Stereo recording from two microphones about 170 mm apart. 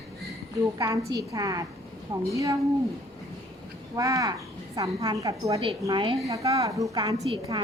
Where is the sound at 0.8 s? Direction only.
20° right (ahead or behind).